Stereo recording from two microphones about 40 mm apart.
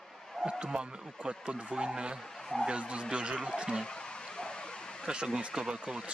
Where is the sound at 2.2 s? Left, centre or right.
Centre.